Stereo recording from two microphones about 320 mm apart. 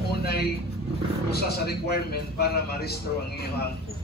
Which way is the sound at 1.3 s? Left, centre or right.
Left.